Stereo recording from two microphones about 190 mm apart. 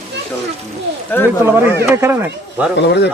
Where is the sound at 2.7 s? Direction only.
65° left (ahead or behind).